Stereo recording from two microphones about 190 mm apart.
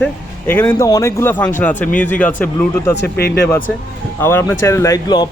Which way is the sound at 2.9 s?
60° left (ahead or behind).